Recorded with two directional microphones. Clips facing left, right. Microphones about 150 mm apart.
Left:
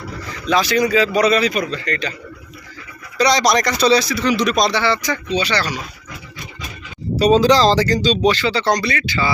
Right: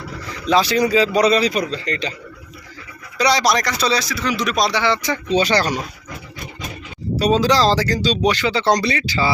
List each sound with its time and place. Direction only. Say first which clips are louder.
0.4 s speech: even; 30° right (ahead or behind)
3.2 s speech: left 2 dB; 10° right (ahead or behind)
5.3 s speech: right 4 dB; 45° right (ahead or behind)
7.2 s speech: left 3 dB; centre (ahead or behind); by 8.7 s 20° right (ahead or behind)
8.7 s speech: right 1 dB; 30° right (ahead or behind)